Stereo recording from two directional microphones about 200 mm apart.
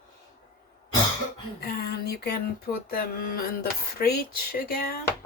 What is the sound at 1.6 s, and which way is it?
Speech, 50° left (ahead or behind).